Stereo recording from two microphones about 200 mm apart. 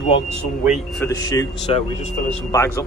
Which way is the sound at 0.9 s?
15° left (ahead or behind).